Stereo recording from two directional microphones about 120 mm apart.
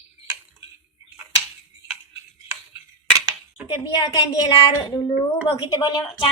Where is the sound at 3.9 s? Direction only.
40° left (ahead or behind).